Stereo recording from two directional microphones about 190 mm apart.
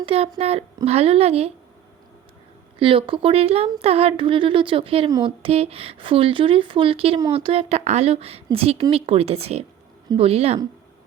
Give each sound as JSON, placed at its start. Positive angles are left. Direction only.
{"t": 0.0, "sound": "speech", "side_deg": -30}
{"t": 2.7, "sound": "speech", "side_deg": -30}